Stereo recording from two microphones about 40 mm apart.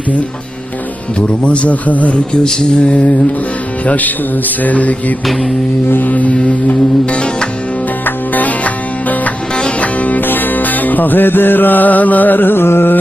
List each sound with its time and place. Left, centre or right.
1.3 s mantra: left
1.7 s mantra: left
2.4 s mantra: centre
2.9 s mantra: left
3.8 s music: left
4.6 s mantra: left
5.9 s music: left
7.0 s mantra: left
8.0 s music: left
10.2 s music: left